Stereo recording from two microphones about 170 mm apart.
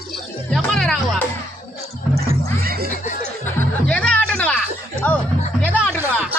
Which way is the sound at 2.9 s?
45° left (ahead or behind).